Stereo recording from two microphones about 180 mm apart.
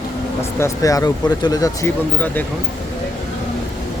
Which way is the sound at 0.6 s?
20° left (ahead or behind).